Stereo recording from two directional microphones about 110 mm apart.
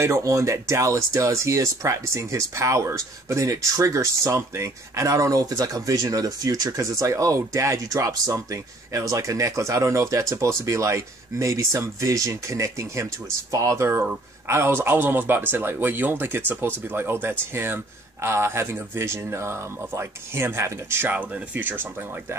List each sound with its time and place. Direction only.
0.0 s speech: 30° right (ahead or behind)